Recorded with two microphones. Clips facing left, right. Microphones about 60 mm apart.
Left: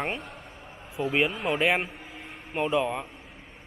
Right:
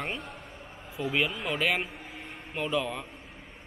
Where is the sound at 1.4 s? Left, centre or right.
Left.